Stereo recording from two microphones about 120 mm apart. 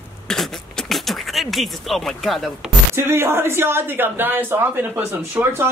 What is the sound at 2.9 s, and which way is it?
Speech, 20° right (ahead or behind).